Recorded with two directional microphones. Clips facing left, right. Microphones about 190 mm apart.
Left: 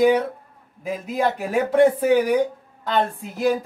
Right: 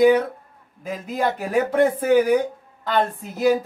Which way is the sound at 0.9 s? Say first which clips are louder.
Left 1 dB; 5° left (ahead or behind).